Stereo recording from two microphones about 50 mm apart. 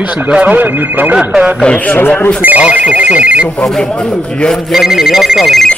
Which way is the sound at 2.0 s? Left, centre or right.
Left.